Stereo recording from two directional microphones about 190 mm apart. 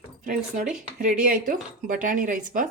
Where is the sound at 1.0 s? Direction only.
45° right (ahead or behind).